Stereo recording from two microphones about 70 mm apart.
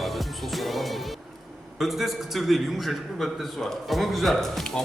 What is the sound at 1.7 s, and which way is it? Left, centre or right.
Speech, centre.